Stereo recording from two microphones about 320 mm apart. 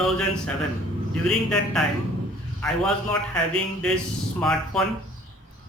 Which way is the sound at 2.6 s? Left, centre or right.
Centre.